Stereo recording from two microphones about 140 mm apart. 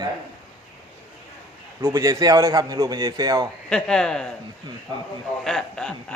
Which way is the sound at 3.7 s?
5° left (ahead or behind).